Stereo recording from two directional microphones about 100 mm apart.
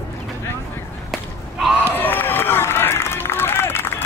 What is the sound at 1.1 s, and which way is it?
Whip, 5° right (ahead or behind).